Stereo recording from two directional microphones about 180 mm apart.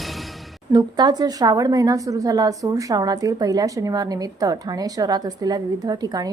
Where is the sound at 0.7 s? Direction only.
25° right (ahead or behind).